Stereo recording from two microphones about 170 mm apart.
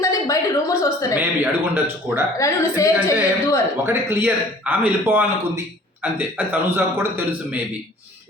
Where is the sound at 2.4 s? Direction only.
20° left (ahead or behind).